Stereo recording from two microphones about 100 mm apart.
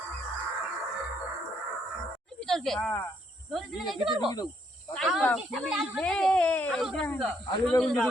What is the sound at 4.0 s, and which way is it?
Speech, 60° right (ahead or behind).